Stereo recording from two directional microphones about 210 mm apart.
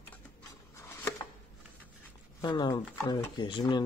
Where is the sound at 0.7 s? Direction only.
15° left (ahead or behind).